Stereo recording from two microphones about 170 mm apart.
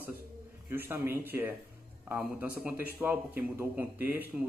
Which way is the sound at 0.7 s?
15° right (ahead or behind).